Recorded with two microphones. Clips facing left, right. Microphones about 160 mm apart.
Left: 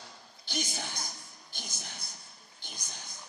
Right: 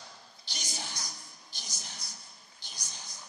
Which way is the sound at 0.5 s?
55° left (ahead or behind).